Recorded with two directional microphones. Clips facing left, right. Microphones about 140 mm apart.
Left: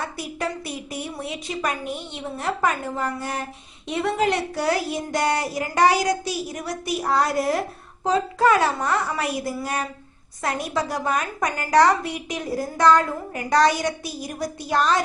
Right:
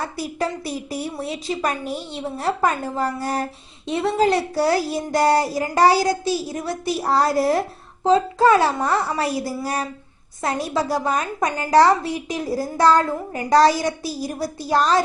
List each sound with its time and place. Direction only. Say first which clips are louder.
0.2 s a woman's voice: right 3 dB; 35° right (ahead or behind)